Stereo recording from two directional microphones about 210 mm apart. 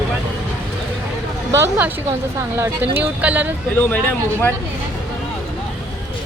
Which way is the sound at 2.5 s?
10° right (ahead or behind).